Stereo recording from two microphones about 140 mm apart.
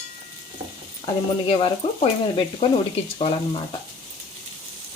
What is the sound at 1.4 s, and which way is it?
Speech, 40° left (ahead or behind).